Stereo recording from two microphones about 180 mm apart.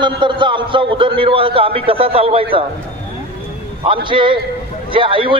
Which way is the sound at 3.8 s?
30° right (ahead or behind).